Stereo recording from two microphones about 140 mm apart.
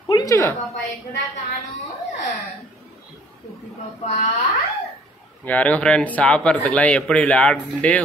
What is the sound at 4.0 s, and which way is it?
Speech, 55° left (ahead or behind).